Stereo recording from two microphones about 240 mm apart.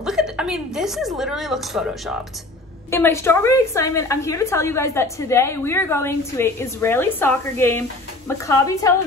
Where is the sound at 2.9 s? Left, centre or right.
Centre.